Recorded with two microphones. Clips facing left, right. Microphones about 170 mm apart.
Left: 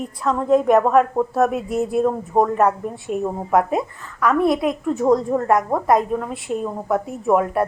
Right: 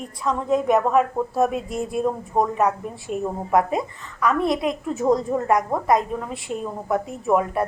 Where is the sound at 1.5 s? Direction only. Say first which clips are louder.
Left 5 dB; 5° left (ahead or behind).